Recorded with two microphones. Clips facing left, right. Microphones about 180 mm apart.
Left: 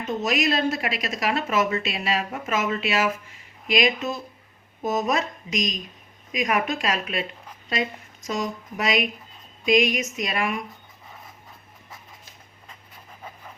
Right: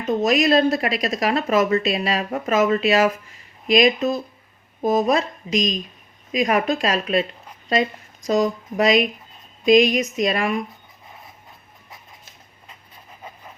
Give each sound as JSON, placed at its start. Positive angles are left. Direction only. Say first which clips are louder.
{"t": 0.1, "sound": "speech", "louder": "right 7 dB", "side_deg": -35}